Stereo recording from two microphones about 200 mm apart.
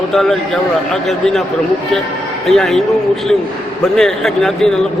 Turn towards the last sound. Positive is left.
turn(degrees=0)  # may be behind; listen again after turning